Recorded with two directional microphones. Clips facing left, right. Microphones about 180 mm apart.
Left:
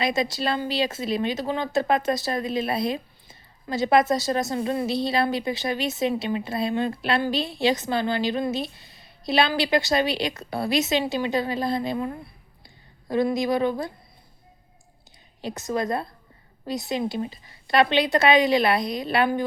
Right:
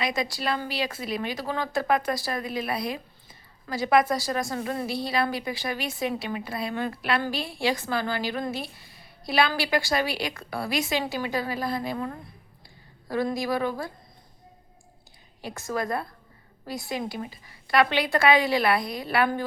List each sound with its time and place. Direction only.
0.0 s speech: 25° left (ahead or behind)
13.2 s speech: 20° left (ahead or behind)
15.4 s speech: 20° left (ahead or behind)